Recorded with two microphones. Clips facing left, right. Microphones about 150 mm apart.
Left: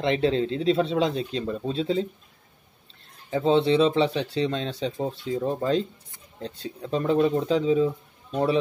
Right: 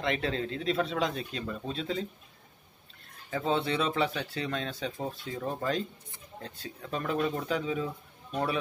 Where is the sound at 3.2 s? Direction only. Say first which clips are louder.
Left 9 dB; 25° left (ahead or behind).